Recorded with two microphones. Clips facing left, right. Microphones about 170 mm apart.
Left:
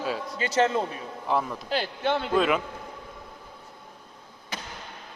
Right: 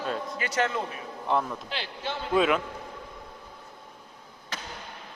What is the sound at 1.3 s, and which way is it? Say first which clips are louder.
Speech: even; centre (ahead or behind).